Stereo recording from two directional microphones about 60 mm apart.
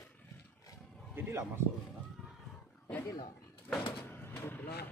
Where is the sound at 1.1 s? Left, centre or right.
Right.